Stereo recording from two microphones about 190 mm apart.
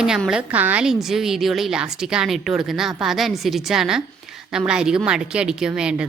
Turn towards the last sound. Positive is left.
turn(degrees=-5)  # may be behind; listen again after turning